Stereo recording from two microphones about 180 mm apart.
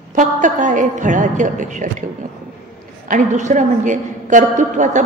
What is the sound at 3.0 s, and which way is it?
A woman's voice, 45° right (ahead or behind).